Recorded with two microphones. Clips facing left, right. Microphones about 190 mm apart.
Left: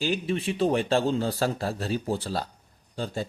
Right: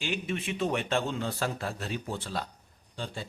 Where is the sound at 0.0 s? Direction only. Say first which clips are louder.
Left 6 dB; 35° left (ahead or behind).